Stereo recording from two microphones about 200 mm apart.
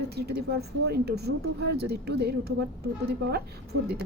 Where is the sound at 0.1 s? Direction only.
55° right (ahead or behind).